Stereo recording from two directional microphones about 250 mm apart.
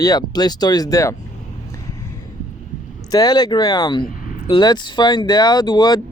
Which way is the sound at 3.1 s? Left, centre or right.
Centre.